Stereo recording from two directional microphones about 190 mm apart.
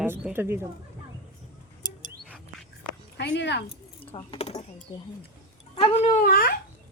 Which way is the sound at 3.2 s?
65° left (ahead or behind).